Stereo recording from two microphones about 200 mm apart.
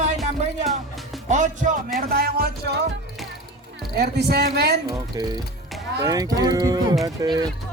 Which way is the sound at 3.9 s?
55° right (ahead or behind).